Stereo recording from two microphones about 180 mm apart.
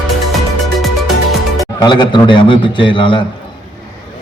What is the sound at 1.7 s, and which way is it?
A man's voice, 25° left (ahead or behind).